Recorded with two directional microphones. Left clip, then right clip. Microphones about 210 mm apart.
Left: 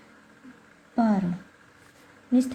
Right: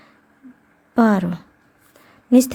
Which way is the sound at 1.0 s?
35° right (ahead or behind).